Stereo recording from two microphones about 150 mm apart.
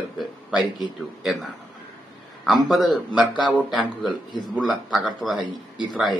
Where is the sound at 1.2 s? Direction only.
Centre (ahead or behind).